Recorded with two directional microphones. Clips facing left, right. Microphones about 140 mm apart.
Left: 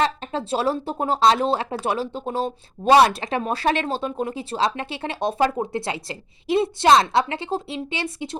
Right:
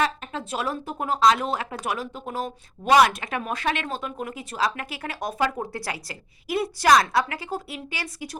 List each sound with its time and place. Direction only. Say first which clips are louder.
0.0 s speech: left 3 dB; 30° left (ahead or behind)